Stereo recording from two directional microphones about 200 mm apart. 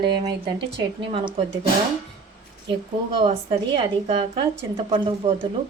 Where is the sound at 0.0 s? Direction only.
25° right (ahead or behind).